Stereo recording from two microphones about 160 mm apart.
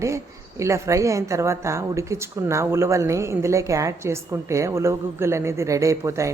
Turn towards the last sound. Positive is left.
turn(degrees=-20)  # may be behind; listen again after turning